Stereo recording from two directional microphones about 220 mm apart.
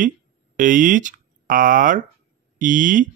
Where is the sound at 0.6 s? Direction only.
35° right (ahead or behind).